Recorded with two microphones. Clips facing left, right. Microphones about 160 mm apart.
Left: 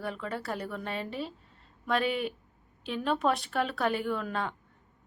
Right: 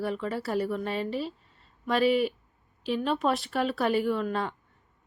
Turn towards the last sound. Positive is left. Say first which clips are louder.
# right 4 dB
turn(degrees=0)  # may be behind; listen again after turning